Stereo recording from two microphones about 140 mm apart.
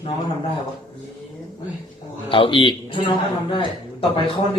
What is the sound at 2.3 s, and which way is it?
Speech, 40° left (ahead or behind).